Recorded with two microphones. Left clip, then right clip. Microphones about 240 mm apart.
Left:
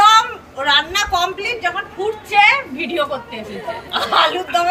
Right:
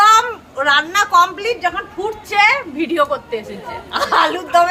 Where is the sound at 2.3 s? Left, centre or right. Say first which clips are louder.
Left 1 dB; centre.